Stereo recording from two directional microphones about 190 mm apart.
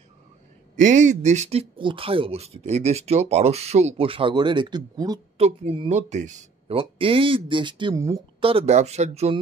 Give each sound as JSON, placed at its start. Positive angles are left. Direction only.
{"t": 0.7, "sound": "speech", "side_deg": -40}
{"t": 5.4, "sound": "speech", "side_deg": -30}
{"t": 8.4, "sound": "speech", "side_deg": -30}